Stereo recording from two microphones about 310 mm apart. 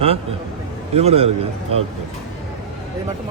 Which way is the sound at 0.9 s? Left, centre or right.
Centre.